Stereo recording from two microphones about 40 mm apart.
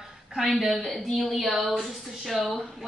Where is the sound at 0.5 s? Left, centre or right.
Centre.